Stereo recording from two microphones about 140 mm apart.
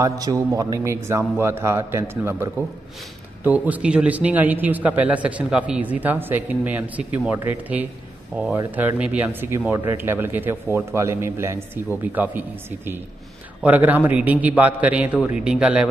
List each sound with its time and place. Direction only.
0.0 s a man's voice: 25° right (ahead or behind); by 15.9 s 5° right (ahead or behind)